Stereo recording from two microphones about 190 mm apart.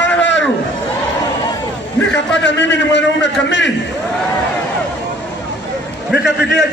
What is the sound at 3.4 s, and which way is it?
Speech, 70° left (ahead or behind).